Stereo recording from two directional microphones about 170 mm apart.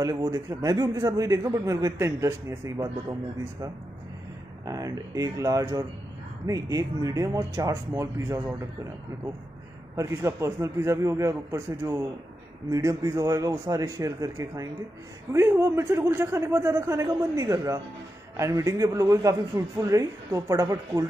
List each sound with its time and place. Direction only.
0.0 s a man's voice: 20° right (ahead or behind)
4.6 s a man's voice: 20° right (ahead or behind)
9.9 s a man's voice: 15° right (ahead or behind)